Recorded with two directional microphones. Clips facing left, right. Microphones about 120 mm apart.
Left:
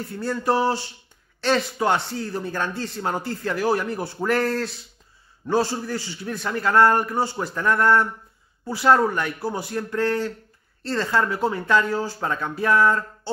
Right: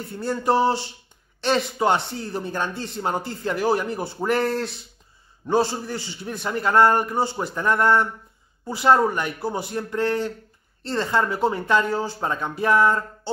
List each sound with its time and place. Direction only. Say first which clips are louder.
0.2 s speech: right 2 dB; 25° right (ahead or behind)